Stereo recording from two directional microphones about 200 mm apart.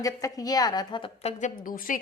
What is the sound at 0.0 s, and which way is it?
A woman's voice, 15° left (ahead or behind).